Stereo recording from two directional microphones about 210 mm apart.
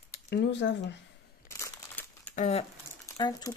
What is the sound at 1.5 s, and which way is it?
Crumpling, 10° left (ahead or behind).